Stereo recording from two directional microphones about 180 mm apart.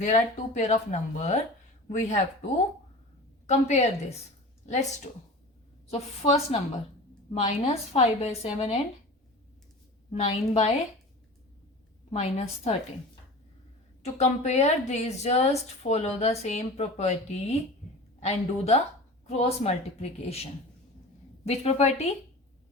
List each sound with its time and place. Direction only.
0.0 s a woman's voice: 40° left (ahead or behind)
3.4 s a woman's voice: 40° left (ahead or behind)
5.9 s a woman's voice: 35° left (ahead or behind)
10.1 s a woman's voice: 35° left (ahead or behind)
12.1 s a woman's voice: 35° left (ahead or behind)
14.0 s a woman's voice: 40° left (ahead or behind)